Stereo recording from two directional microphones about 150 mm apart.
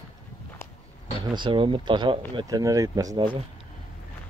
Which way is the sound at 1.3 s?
35° right (ahead or behind).